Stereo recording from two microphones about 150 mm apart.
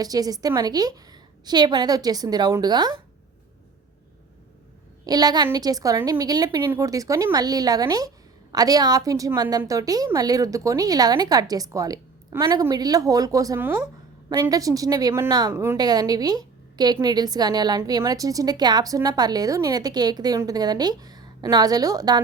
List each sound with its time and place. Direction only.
0.0 s a woman's voice: 25° right (ahead or behind)
5.0 s a woman's voice: 25° right (ahead or behind)